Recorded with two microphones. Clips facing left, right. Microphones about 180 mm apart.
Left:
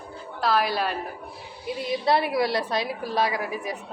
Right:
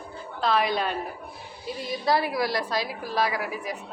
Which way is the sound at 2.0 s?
25° left (ahead or behind).